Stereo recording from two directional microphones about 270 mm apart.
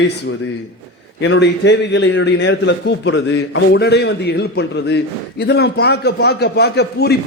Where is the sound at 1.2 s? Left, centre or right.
Left.